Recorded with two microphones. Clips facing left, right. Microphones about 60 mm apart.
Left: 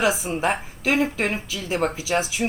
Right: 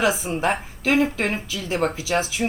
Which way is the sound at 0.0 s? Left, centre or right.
Centre.